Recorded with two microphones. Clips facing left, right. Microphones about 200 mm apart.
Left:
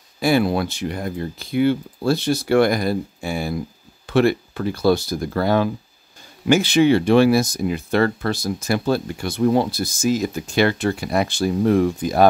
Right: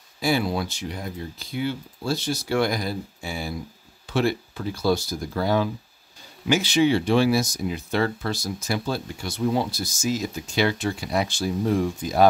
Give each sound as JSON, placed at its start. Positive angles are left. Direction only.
{"t": 0.2, "sound": "speech", "side_deg": 60}